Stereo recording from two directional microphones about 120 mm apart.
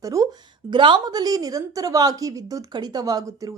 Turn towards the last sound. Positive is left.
turn(degrees=-30)  # may be behind; listen again after turning